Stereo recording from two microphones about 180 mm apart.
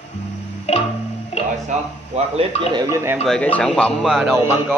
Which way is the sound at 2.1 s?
35° right (ahead or behind).